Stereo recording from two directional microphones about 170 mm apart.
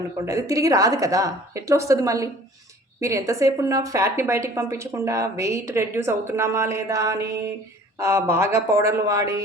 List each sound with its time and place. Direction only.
0.3 s a woman's voice: 20° right (ahead or behind)